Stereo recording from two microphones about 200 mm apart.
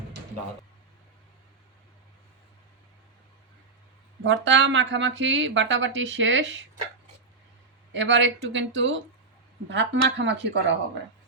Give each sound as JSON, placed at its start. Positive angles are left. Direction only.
{"t": 4.2, "sound": "speech", "side_deg": -65}
{"t": 7.9, "sound": "speech", "side_deg": -65}